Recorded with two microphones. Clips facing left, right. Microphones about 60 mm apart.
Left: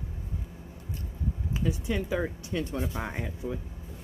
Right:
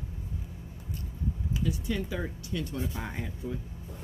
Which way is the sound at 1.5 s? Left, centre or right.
Left.